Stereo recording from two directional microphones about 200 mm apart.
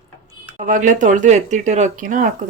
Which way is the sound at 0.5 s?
40° right (ahead or behind).